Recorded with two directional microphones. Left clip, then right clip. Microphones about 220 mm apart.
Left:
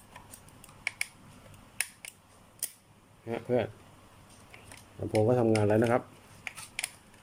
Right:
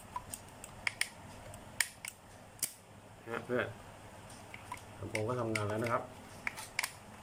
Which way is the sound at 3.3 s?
15° left (ahead or behind).